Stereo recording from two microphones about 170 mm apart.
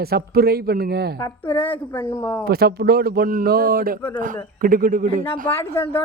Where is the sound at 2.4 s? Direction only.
70° right (ahead or behind).